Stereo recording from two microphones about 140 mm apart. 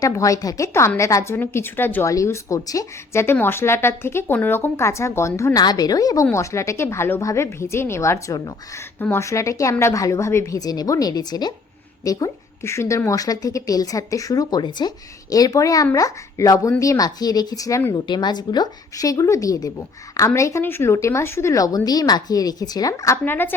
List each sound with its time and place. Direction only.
0.0 s speech: 25° left (ahead or behind)
17.9 s speech: 30° left (ahead or behind); by 23.6 s 15° left (ahead or behind)